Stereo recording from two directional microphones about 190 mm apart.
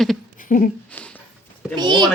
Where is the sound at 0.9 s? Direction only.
5° left (ahead or behind).